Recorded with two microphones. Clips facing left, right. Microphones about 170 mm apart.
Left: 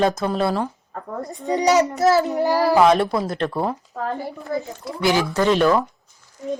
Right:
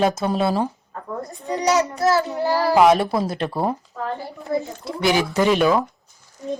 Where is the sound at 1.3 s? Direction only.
20° left (ahead or behind).